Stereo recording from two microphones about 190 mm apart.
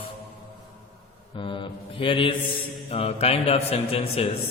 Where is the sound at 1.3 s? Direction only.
25° left (ahead or behind).